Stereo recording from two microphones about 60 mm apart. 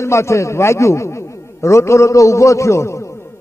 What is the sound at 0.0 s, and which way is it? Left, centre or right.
A man's voice, left.